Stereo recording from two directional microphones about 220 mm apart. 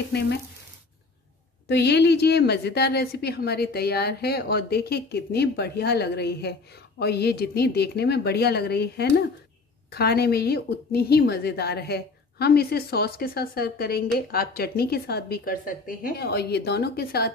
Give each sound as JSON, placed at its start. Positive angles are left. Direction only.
{"t": 1.7, "sound": "a woman's voice", "side_deg": 50}